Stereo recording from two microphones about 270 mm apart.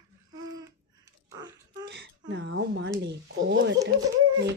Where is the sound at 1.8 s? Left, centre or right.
Right.